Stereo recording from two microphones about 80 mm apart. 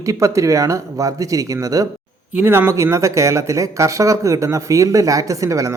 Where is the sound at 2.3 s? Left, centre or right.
Right.